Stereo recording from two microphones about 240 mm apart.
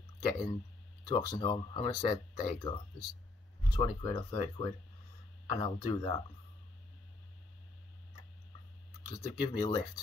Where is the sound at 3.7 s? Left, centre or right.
Centre.